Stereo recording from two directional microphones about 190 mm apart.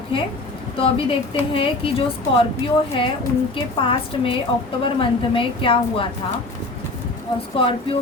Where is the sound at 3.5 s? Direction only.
30° left (ahead or behind).